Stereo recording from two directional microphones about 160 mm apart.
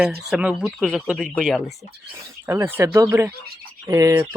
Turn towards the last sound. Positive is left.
turn(degrees=-15)  # may be behind; listen again after turning